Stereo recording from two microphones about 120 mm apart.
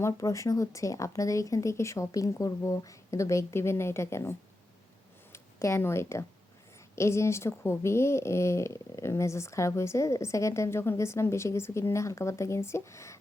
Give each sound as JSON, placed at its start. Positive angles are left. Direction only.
{"t": 0.0, "sound": "speech", "side_deg": 25}